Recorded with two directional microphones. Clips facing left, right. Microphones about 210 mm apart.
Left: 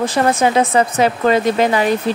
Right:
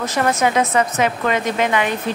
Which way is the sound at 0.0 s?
30° left (ahead or behind).